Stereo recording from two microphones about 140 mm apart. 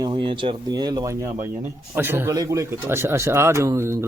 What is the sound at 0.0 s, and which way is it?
Speech, 30° right (ahead or behind).